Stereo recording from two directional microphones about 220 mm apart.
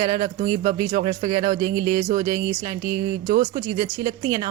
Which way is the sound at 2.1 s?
20° right (ahead or behind).